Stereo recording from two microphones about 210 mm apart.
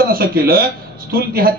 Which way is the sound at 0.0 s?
45° right (ahead or behind).